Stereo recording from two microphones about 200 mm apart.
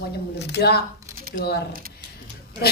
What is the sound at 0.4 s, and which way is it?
Speech, 55° left (ahead or behind).